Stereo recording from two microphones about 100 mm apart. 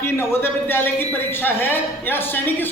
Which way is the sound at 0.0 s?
25° left (ahead or behind).